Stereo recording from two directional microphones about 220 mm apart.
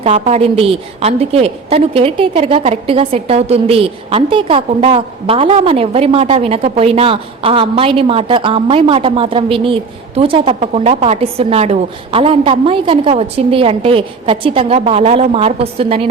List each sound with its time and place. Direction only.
0.0 s a woman's voice: 30° right (ahead or behind)